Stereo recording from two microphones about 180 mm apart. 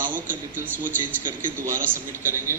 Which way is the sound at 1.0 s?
25° right (ahead or behind).